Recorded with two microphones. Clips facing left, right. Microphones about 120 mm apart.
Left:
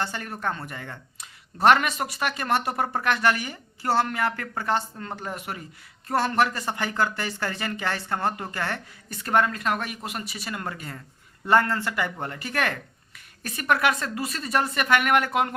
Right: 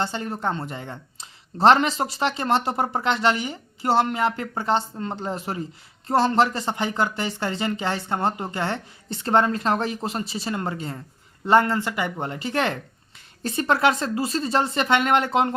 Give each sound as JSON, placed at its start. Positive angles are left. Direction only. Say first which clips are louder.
{"t": 0.0, "sound": "speech", "louder": "right 3 dB", "side_deg": -20}